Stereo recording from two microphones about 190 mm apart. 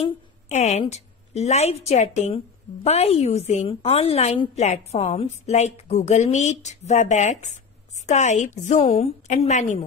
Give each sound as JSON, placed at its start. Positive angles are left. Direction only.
{"t": 0.5, "sound": "a woman's voice", "side_deg": 35}